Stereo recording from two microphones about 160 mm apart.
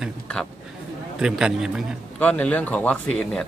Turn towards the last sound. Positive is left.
turn(degrees=5)  # may be behind; listen again after turning